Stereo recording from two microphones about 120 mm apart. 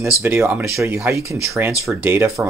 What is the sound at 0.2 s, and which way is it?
Speech, 15° right (ahead or behind).